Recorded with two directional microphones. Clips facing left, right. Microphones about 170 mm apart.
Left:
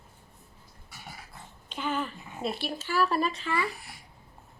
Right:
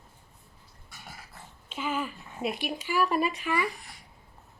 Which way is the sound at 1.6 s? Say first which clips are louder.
Even; 5° right (ahead or behind).